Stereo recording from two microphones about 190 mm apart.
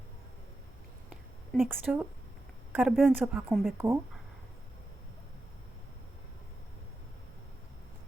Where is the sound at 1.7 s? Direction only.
10° right (ahead or behind).